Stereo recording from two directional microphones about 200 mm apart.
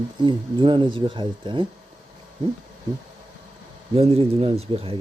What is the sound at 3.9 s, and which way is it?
Speech, 30° right (ahead or behind).